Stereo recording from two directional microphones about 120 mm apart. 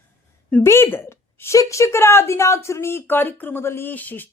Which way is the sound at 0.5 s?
20° left (ahead or behind).